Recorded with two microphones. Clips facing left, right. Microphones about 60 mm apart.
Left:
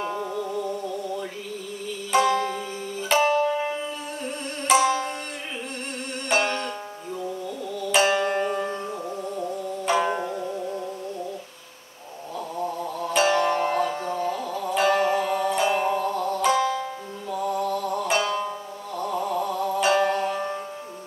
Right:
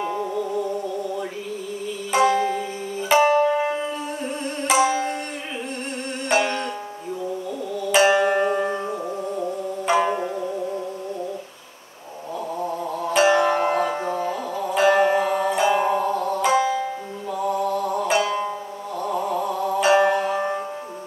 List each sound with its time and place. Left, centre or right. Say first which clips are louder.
0.3 s music: right 3 dB; centre
6.2 s music: right 2 dB; centre
7.9 s music: right 4 dB; centre
12.6 s music: right 2 dB; centre